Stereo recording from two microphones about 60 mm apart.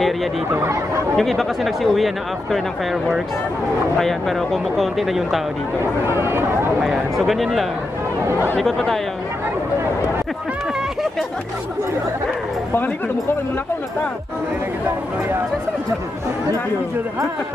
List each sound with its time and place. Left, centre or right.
0.5 s speech: right
1.1 s speech: centre
6.0 s speech: right
6.8 s speech: centre
12.7 s speech: left